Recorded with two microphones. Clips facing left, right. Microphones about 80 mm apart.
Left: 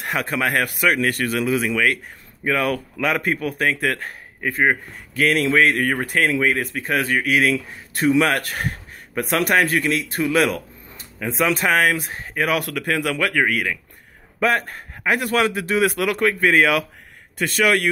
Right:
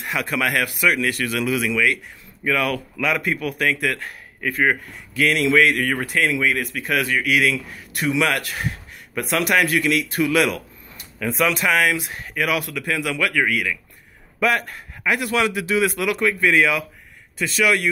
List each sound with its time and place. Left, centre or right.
0.0 s a man's voice: left
1.7 s speech: left
2.4 s a man's voice: left
11.1 s speech: left
11.5 s a man's voice: left
12.5 s a man's voice: left